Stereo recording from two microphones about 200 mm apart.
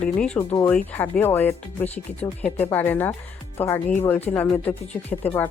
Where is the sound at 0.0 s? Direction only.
5° left (ahead or behind).